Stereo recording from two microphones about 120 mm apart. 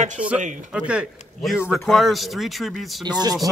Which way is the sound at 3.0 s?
35° right (ahead or behind).